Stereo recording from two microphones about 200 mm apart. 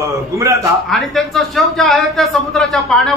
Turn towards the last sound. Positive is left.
turn(degrees=0)  # may be behind; listen again after turning